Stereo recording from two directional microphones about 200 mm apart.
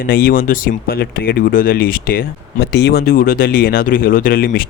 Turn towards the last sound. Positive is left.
turn(degrees=45)  # may be behind; listen again after turning